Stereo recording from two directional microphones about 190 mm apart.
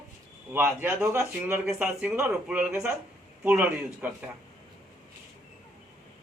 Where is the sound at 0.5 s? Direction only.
10° right (ahead or behind).